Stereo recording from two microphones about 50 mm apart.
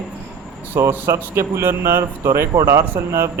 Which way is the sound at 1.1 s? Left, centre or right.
Right.